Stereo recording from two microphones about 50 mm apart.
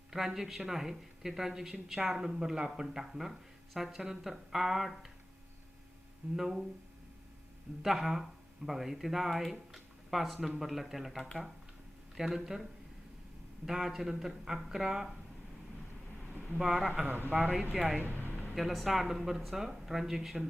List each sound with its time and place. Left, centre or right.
0.1 s speech: centre
6.3 s speech: centre
7.8 s speech: centre
13.7 s speech: centre
16.6 s speech: centre
17.3 s speech: centre
17.7 s speech: centre
18.2 s a sound: left
18.5 s speech: centre